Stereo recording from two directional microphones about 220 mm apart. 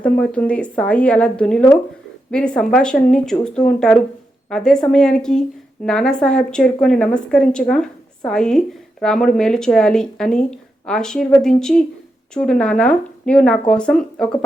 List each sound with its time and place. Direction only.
0.0 s a woman's voice: 5° left (ahead or behind)